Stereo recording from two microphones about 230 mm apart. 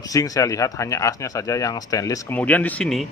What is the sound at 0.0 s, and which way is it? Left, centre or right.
Speech, centre.